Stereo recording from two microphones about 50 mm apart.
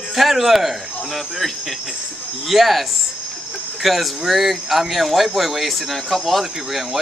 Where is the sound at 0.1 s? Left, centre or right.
Centre.